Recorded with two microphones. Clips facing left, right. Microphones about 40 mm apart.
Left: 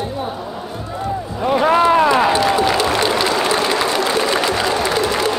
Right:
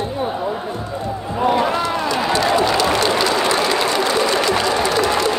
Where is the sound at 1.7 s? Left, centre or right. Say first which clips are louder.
Left 7 dB; left.